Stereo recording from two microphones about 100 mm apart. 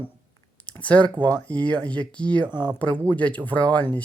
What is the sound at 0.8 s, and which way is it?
Speech, 15° left (ahead or behind).